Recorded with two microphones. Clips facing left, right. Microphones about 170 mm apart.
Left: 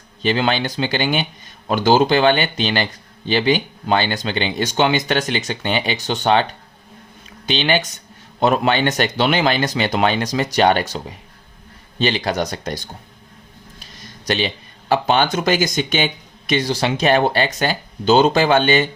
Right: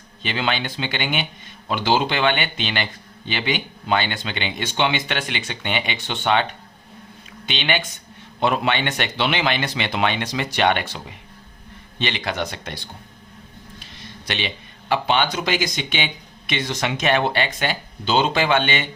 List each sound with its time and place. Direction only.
0.2 s speech: 40° left (ahead or behind)